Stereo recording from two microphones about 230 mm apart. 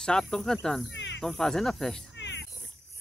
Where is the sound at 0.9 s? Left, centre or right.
Left.